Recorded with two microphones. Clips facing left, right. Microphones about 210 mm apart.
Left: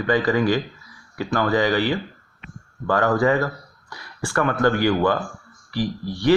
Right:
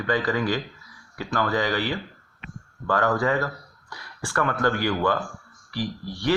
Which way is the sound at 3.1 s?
15° left (ahead or behind).